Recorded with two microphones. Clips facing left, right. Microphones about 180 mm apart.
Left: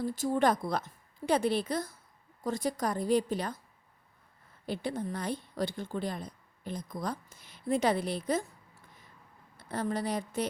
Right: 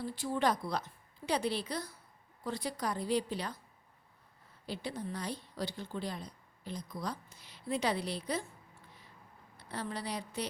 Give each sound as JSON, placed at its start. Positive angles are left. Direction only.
{"t": 0.0, "sound": "speech", "side_deg": 45}
{"t": 4.6, "sound": "speech", "side_deg": 50}
{"t": 9.6, "sound": "a woman's voice", "side_deg": 45}